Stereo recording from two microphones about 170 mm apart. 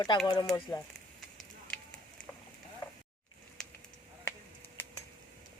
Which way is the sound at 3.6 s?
5° left (ahead or behind).